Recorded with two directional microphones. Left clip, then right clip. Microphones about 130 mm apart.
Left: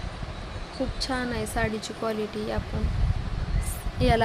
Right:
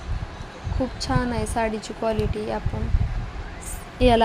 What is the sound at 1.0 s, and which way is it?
Speech, 10° right (ahead or behind).